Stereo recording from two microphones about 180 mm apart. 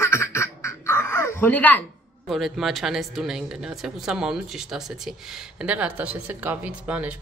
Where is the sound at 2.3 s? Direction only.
Centre (ahead or behind).